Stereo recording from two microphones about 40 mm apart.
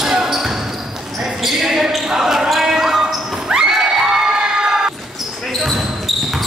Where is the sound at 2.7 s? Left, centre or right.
Centre.